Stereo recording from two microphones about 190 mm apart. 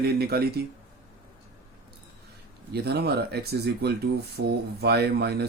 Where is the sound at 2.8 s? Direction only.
60° right (ahead or behind).